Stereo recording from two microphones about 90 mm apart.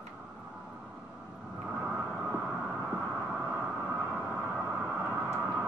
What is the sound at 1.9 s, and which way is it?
Vehicle, 25° right (ahead or behind).